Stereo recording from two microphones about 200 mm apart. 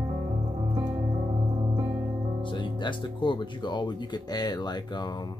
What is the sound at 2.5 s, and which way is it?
Speech, 25° left (ahead or behind).